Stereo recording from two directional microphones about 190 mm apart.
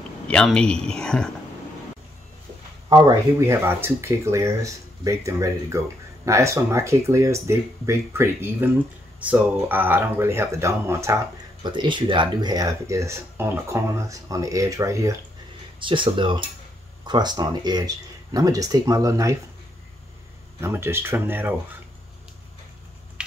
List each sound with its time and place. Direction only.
0.3 s speech: 5° left (ahead or behind)
2.9 s speech: 20° right (ahead or behind)
11.6 s speech: 25° right (ahead or behind)
20.6 s speech: 15° right (ahead or behind)